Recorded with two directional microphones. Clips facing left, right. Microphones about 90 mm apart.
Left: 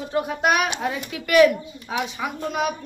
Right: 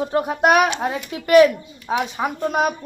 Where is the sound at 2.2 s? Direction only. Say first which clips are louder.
Right 5 dB; 45° right (ahead or behind).